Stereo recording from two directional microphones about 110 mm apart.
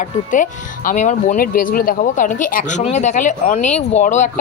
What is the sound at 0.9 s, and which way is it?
Speech, 90° left.